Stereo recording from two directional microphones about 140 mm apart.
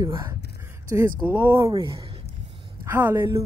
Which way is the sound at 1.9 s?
45° right (ahead or behind).